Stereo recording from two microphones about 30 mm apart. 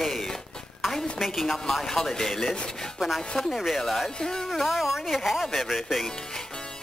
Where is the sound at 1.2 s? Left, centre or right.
Centre.